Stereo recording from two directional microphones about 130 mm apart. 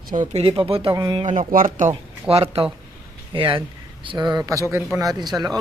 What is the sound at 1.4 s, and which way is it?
Speech, 75° right (ahead or behind).